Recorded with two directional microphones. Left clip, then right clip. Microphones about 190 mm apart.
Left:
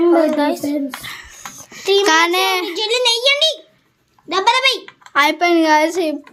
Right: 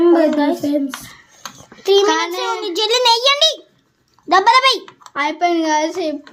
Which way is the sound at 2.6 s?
45° right (ahead or behind).